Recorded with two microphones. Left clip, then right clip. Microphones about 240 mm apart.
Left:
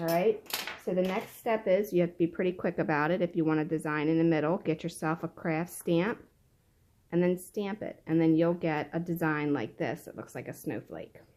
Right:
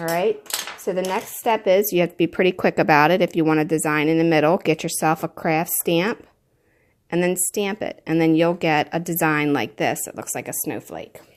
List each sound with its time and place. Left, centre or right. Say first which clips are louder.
0.9 s speech: right 7 dB; right